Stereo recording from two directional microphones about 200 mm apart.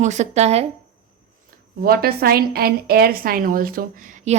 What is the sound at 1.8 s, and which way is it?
A woman's voice, 50° right (ahead or behind).